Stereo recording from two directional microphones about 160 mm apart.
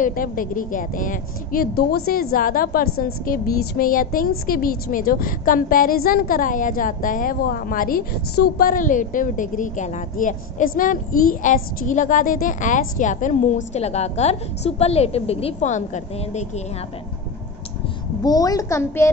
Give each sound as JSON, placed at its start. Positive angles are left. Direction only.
{"t": 0.0, "sound": "a woman's voice", "side_deg": 60}
{"t": 18.2, "sound": "a child's voice", "side_deg": 25}